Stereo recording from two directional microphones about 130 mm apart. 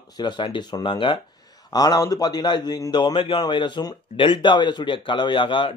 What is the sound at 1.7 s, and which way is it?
Speech, 30° left (ahead or behind).